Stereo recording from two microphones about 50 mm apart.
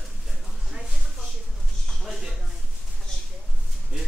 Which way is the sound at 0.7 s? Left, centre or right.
Centre.